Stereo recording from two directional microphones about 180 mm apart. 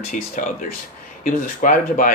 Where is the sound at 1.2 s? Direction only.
45° left (ahead or behind).